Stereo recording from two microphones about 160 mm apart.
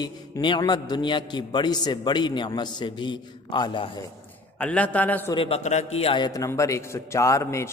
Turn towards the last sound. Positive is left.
turn(degrees=20)  # may be behind; listen again after turning